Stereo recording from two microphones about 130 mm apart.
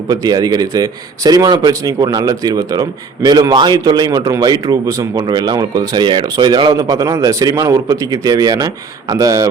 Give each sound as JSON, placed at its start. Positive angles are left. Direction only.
{"t": 0.1, "sound": "speech", "side_deg": -30}